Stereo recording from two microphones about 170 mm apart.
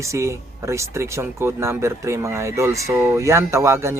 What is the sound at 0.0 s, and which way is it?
Speech, 15° right (ahead or behind).